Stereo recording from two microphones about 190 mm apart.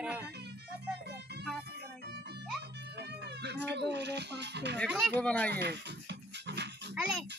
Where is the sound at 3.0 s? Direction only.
65° right (ahead or behind).